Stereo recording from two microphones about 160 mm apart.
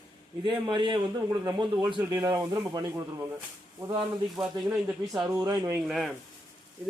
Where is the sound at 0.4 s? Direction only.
30° right (ahead or behind).